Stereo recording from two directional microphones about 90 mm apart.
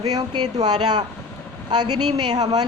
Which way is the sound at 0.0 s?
45° right (ahead or behind).